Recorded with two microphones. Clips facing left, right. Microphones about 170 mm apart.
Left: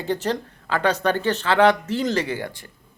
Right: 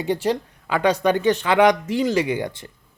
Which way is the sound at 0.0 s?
10° right (ahead or behind).